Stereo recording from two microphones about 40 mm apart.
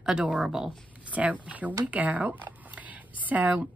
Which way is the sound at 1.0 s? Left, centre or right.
Right.